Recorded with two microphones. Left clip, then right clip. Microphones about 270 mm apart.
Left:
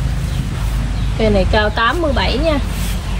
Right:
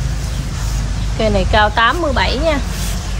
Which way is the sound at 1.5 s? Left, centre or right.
Centre.